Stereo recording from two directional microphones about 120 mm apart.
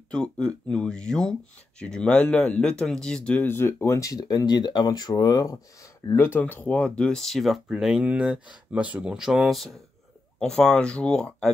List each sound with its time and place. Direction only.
0.1 s speech: 10° left (ahead or behind)